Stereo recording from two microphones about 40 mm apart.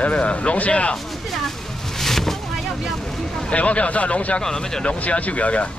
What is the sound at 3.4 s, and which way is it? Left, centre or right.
Speech, left.